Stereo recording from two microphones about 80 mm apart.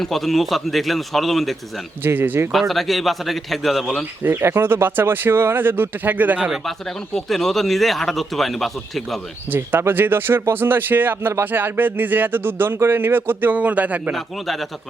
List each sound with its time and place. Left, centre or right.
0.0 s speech: centre
2.0 s speech: right
2.5 s speech: centre
4.2 s speech: right
6.5 s speech: centre
9.5 s speech: right
14.1 s speech: centre